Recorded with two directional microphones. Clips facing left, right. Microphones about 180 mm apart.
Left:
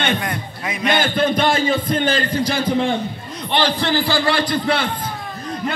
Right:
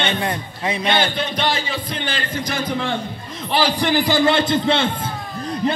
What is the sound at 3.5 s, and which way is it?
A man's voice, 10° right (ahead or behind).